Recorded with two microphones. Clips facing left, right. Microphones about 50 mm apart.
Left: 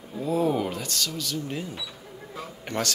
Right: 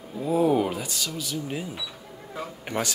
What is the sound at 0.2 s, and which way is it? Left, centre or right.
Speech, centre.